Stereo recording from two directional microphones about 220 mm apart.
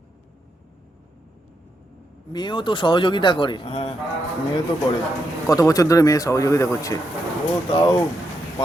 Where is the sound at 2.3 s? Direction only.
20° left (ahead or behind).